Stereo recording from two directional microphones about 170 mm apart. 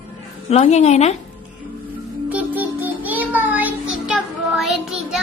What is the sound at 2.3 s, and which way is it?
Music, 10° right (ahead or behind).